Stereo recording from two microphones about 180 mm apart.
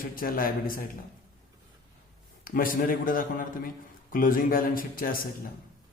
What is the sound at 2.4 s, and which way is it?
A man's voice, 50° left (ahead or behind).